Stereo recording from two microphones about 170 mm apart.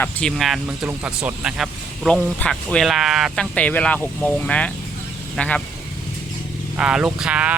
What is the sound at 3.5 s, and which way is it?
Speech, 10° left (ahead or behind).